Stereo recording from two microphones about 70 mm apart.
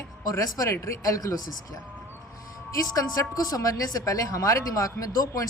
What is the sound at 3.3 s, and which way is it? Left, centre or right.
A woman's voice, left.